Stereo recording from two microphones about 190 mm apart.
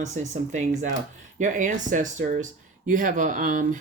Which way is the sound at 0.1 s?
40° right (ahead or behind).